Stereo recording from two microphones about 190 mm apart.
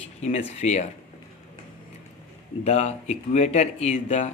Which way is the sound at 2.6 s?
35° left (ahead or behind).